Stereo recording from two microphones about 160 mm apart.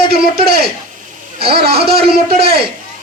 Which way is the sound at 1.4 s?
35° right (ahead or behind).